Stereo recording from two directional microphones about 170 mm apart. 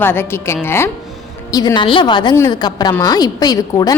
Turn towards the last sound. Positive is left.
turn(degrees=20)  # may be behind; listen again after turning